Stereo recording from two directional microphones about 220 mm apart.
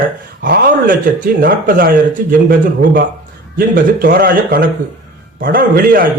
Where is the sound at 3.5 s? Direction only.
40° right (ahead or behind).